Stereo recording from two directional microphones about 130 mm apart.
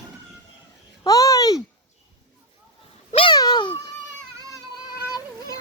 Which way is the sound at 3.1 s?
40° left (ahead or behind).